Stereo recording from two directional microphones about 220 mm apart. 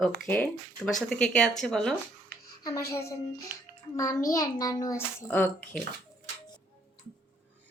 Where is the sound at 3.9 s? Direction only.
15° left (ahead or behind).